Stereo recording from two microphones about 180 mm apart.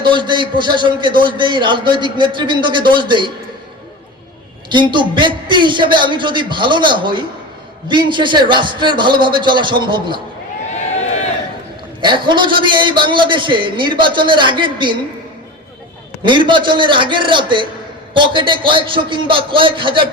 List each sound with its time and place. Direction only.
0.0 s a man's voice: 25° right (ahead or behind)
4.7 s a man's voice: 25° right (ahead or behind)
11.9 s a man's voice: 25° right (ahead or behind)
16.2 s a man's voice: 25° right (ahead or behind)